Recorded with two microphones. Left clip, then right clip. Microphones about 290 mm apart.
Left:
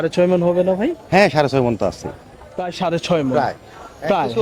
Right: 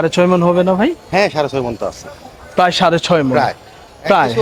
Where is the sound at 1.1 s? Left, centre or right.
Left.